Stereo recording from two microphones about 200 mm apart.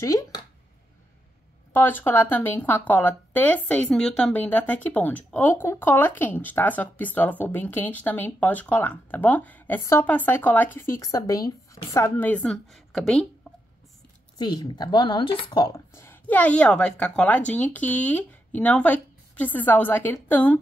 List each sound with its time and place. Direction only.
0.0 s speech: 15° left (ahead or behind)
1.7 s speech: 10° left (ahead or behind)
14.4 s speech: 20° left (ahead or behind)